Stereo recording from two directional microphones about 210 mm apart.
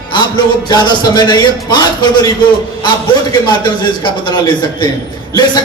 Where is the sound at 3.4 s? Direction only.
20° left (ahead or behind).